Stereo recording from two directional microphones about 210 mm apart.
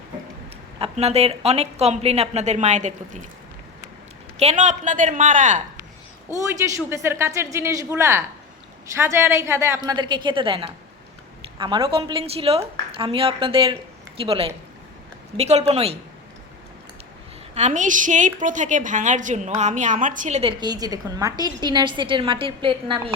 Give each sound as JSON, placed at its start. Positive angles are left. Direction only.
{"t": 0.8, "sound": "a woman's voice", "side_deg": -30}
{"t": 4.4, "sound": "a woman's voice", "side_deg": -35}
{"t": 6.3, "sound": "a woman's voice", "side_deg": -15}
{"t": 17.5, "sound": "a woman's voice", "side_deg": -35}